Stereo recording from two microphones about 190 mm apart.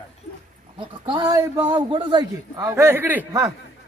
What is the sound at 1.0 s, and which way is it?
A man's voice, 20° right (ahead or behind).